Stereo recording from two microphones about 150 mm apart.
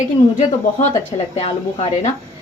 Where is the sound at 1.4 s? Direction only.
40° left (ahead or behind).